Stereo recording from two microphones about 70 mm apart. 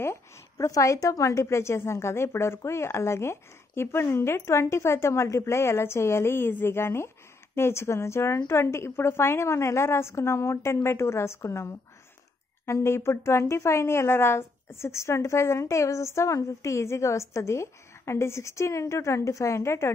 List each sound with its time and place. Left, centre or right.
0.0 s a woman's voice: left
0.7 s a woman's voice: left